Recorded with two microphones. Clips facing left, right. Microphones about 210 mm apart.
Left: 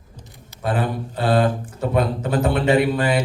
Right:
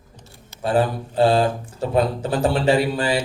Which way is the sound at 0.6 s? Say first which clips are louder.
Right 3 dB; 30° right (ahead or behind).